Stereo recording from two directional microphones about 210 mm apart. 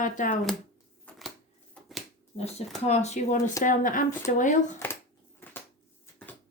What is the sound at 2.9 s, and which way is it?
Speech, 35° left (ahead or behind).